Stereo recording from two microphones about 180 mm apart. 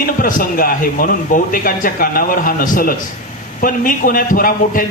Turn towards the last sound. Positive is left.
turn(degrees=50)  # may be behind; listen again after turning